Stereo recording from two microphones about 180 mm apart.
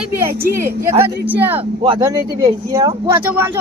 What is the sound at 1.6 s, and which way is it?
Speech, 25° right (ahead or behind).